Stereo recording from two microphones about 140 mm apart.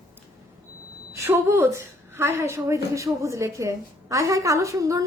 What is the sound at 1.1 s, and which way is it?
A woman's voice, 20° right (ahead or behind).